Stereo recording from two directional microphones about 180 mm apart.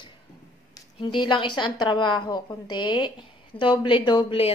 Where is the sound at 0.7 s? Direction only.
25° left (ahead or behind).